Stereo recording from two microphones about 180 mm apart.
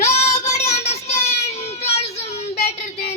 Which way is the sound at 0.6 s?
35° left (ahead or behind).